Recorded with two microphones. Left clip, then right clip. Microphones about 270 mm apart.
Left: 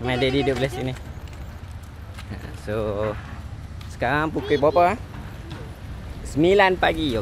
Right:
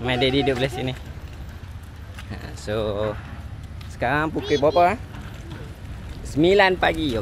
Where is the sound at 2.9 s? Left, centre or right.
Centre.